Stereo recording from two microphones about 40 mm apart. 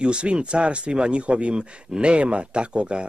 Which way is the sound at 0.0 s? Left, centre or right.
Right.